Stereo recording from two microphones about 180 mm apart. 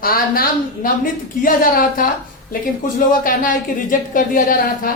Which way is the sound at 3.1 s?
50° left (ahead or behind).